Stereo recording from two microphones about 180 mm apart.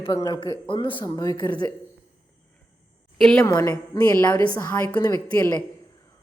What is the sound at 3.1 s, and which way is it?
Speech, centre (ahead or behind).